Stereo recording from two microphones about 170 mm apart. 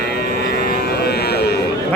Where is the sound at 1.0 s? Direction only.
70° left (ahead or behind).